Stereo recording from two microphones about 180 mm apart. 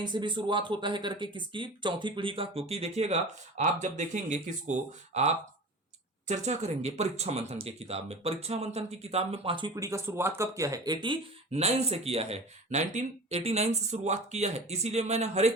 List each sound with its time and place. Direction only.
0.0 s speech: 25° right (ahead or behind)
11.5 s speech: 35° right (ahead or behind)